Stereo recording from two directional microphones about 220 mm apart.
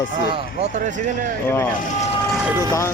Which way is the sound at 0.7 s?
35° right (ahead or behind).